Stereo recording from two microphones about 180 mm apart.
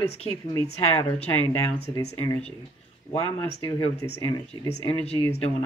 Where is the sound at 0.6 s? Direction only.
35° left (ahead or behind).